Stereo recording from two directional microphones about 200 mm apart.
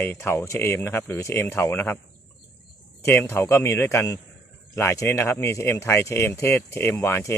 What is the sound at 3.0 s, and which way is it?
A man's voice, 10° left (ahead or behind).